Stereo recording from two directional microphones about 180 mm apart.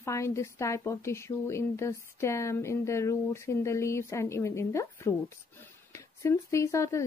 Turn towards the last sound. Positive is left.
turn(degrees=15)  # may be behind; listen again after turning